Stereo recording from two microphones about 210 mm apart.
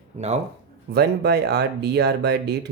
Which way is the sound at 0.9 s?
50° right (ahead or behind).